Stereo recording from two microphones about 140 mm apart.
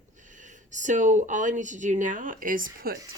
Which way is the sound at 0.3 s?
65° right (ahead or behind).